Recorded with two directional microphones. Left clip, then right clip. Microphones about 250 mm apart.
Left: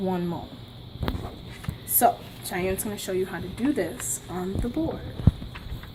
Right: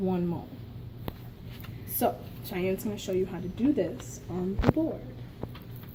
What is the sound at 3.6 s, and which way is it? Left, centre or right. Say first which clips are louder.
Speech: left 1 dB; left.